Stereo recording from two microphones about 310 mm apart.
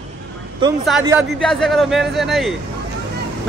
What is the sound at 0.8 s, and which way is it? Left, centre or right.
A man's voice, centre.